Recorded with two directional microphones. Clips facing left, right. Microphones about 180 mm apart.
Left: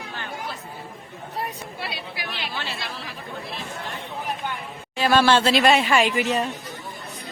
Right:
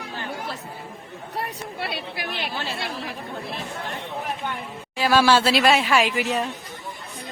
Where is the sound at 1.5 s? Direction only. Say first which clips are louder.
Right 2 dB; 60° right (ahead or behind).